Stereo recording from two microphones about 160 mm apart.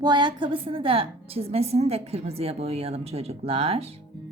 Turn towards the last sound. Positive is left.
turn(degrees=-40)  # may be behind; listen again after turning